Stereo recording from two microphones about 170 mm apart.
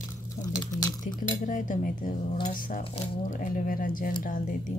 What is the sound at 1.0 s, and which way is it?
Speech, 50° left (ahead or behind).